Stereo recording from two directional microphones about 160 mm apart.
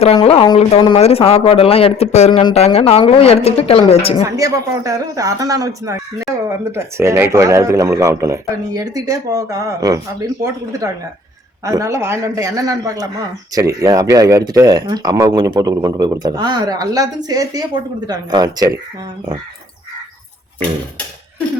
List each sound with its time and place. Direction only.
0.2 s a woman's voice: 30° left (ahead or behind)
4.2 s speech: 20° right (ahead or behind)